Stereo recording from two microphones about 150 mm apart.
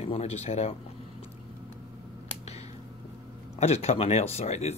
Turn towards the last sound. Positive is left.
turn(degrees=45)  # may be behind; listen again after turning